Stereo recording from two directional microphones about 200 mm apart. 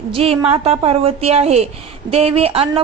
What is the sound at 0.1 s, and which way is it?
A woman's voice, 30° right (ahead or behind).